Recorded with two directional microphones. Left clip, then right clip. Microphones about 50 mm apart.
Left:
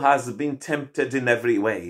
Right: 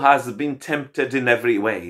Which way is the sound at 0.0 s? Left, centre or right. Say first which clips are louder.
Right 3 dB; centre.